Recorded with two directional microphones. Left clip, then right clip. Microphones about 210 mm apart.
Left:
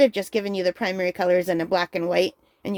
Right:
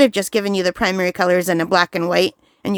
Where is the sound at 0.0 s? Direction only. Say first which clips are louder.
Right 4 dB; 40° right (ahead or behind).